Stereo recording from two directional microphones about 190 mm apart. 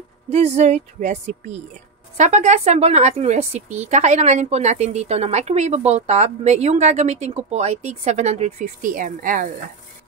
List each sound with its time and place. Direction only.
0.3 s a woman's voice: 35° right (ahead or behind)